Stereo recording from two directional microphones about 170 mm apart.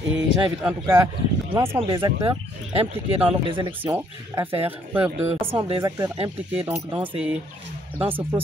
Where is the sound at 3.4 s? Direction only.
30° right (ahead or behind).